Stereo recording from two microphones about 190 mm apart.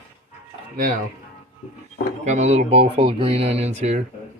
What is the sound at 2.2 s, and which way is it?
Speech, 40° right (ahead or behind).